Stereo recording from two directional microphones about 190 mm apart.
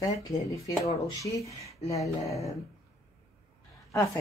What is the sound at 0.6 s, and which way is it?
Speech, 15° left (ahead or behind).